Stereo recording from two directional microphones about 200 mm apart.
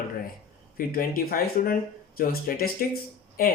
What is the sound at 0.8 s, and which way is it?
Speech, 45° left (ahead or behind).